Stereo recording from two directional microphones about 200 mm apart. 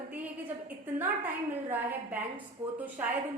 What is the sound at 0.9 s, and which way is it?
A woman's voice, 10° right (ahead or behind).